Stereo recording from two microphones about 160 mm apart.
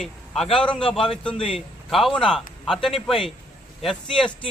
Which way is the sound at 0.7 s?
5° left (ahead or behind).